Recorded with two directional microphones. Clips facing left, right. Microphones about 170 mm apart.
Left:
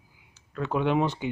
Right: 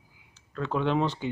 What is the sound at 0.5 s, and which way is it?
Speech, 10° left (ahead or behind).